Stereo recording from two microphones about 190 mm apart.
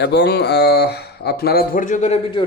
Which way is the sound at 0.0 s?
60° left (ahead or behind).